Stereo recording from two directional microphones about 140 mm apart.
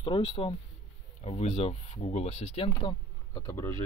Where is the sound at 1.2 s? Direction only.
50° left (ahead or behind).